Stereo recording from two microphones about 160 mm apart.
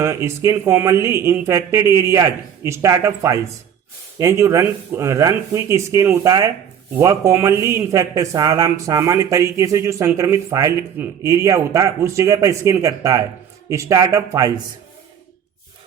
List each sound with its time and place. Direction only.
0.0 s speech: 15° right (ahead or behind)